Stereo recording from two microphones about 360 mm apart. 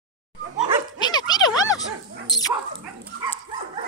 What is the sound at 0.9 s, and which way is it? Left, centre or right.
Dog, centre.